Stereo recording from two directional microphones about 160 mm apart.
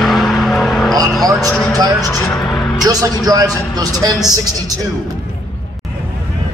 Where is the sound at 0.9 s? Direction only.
20° right (ahead or behind).